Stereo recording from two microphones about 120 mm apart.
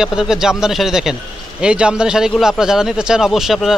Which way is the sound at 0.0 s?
5° right (ahead or behind).